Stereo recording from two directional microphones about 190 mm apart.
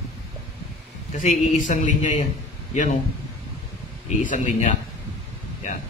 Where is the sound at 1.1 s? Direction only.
40° left (ahead or behind).